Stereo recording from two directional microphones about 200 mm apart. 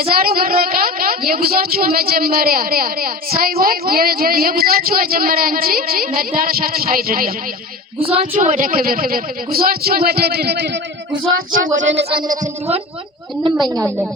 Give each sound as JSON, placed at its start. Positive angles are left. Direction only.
{"t": 0.1, "sound": "speech", "side_deg": -50}
{"t": 7.9, "sound": "speech", "side_deg": -30}
{"t": 11.1, "sound": "child singing", "side_deg": -80}
{"t": 12.3, "sound": "speech", "side_deg": -35}